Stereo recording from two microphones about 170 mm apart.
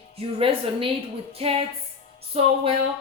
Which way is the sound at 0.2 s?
30° right (ahead or behind).